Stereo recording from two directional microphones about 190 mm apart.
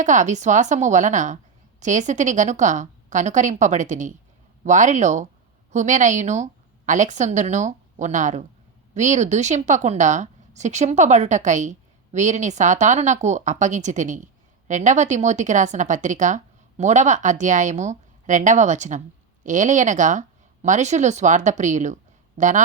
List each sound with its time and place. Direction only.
0.0 s speech: 40° right (ahead or behind)